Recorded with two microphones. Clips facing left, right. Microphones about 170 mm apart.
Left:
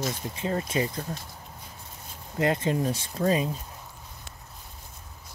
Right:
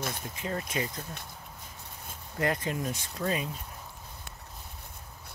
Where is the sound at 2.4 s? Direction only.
25° left (ahead or behind).